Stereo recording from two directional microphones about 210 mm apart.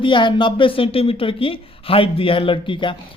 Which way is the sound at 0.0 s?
25° left (ahead or behind).